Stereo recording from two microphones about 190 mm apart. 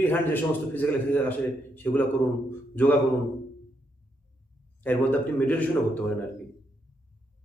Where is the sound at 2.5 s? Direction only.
10° left (ahead or behind).